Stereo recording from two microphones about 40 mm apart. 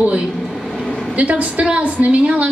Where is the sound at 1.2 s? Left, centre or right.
Right.